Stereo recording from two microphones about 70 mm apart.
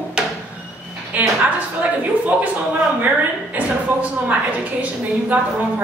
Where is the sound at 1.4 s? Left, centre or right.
Right.